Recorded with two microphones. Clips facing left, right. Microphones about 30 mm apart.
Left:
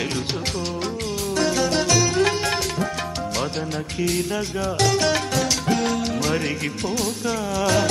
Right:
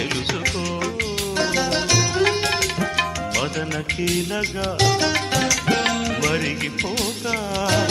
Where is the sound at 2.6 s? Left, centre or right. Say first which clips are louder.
Right 2 dB; right.